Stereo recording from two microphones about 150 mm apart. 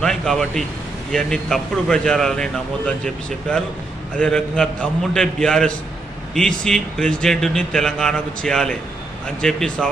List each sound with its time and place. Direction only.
0.0 s a man's voice: 5° left (ahead or behind)